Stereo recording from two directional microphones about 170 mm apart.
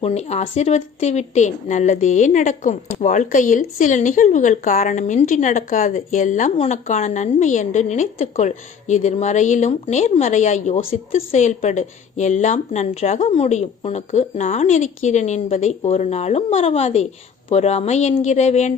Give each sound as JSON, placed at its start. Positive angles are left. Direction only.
{"t": 0.0, "sound": "speech", "side_deg": 40}